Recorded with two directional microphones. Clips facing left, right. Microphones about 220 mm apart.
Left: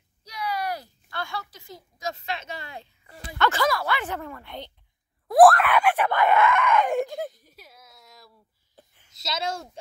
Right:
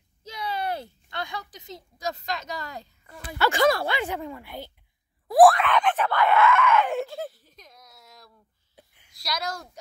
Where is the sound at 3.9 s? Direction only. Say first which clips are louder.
Right 2 dB; 15° right (ahead or behind).